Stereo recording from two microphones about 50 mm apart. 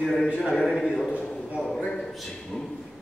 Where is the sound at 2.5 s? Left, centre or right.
Centre.